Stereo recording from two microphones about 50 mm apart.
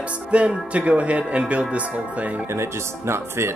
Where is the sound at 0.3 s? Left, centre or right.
Right.